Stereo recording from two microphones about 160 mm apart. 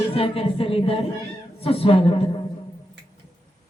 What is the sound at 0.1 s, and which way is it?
Speech, 35° left (ahead or behind).